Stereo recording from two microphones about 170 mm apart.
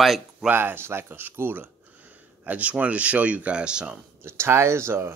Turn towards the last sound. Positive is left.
turn(degrees=-15)  # may be behind; listen again after turning